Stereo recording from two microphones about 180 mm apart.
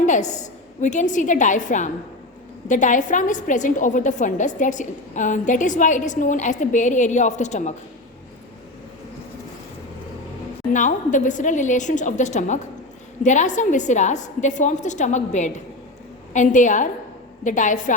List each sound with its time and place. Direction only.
0.0 s a woman's voice: 40° left (ahead or behind)
10.7 s a woman's voice: 45° left (ahead or behind)